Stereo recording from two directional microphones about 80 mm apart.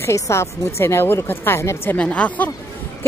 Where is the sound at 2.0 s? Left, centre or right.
Centre.